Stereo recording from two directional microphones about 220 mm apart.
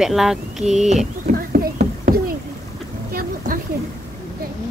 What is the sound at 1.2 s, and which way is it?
Children playing, 40° right (ahead or behind).